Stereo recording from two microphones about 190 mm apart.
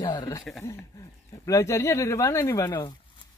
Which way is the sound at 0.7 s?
15° left (ahead or behind).